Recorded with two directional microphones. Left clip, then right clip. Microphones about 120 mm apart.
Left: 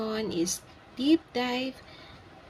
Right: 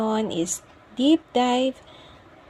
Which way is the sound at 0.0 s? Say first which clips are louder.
Right 7 dB; 25° right (ahead or behind).